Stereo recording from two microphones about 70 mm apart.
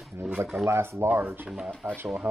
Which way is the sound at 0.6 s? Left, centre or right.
Right.